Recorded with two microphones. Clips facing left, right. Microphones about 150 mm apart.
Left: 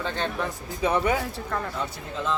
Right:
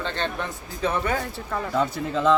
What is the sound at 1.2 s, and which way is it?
Speech, 5° right (ahead or behind).